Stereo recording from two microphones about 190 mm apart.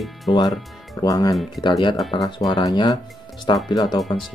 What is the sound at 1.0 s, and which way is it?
Speech, 20° left (ahead or behind).